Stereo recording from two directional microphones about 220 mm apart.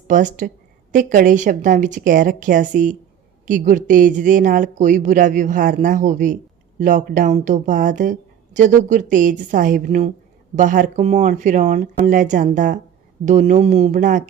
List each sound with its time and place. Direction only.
0.1 s speech: 35° right (ahead or behind)